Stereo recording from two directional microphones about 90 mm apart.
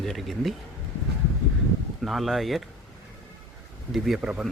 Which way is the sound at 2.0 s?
Centre (ahead or behind).